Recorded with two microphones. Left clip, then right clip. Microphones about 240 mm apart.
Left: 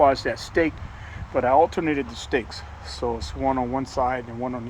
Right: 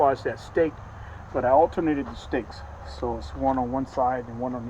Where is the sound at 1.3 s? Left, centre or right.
Left.